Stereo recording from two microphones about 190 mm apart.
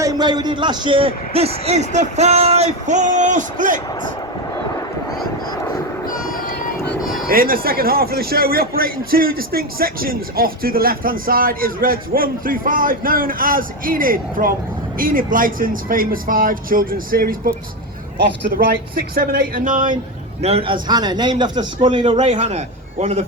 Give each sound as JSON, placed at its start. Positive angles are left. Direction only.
{"t": 0.0, "sound": "a man's voice", "side_deg": -20}
{"t": 6.1, "sound": "boat", "side_deg": 45}
{"t": 6.8, "sound": "a sound", "side_deg": 0}
{"t": 7.3, "sound": "a man's voice", "side_deg": -50}
{"t": 18.5, "sound": "a man's voice", "side_deg": -50}
{"t": 20.4, "sound": "a man's voice", "side_deg": -30}